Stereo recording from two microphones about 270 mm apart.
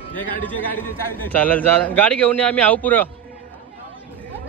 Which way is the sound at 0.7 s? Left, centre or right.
Centre.